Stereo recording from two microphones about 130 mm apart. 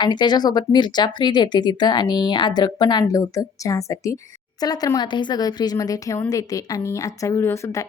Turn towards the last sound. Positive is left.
turn(degrees=25)  # may be behind; listen again after turning